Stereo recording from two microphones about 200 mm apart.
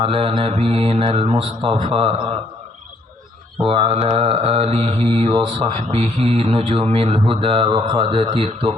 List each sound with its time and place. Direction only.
0.0 s mantra: 30° right (ahead or behind)
3.6 s mantra: 30° right (ahead or behind)